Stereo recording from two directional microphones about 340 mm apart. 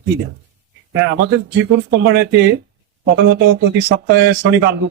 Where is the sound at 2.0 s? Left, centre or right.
Right.